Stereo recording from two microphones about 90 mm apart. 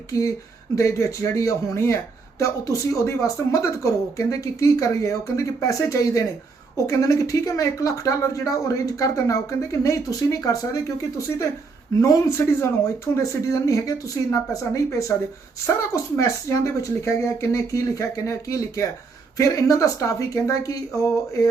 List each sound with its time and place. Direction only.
0.8 s speech: 35° left (ahead or behind)
11.9 s speech: 35° left (ahead or behind)